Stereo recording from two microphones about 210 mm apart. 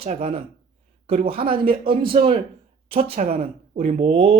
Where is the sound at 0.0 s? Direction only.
30° right (ahead or behind).